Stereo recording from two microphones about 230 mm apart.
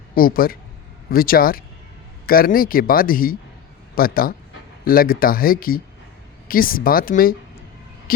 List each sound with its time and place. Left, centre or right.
0.1 s a man's voice: left